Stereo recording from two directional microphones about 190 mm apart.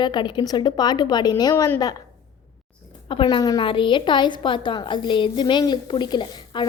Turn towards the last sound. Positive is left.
turn(degrees=25)  # may be behind; listen again after turning